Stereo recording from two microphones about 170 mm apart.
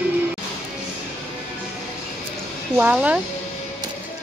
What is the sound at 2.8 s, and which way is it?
Speech, 10° right (ahead or behind).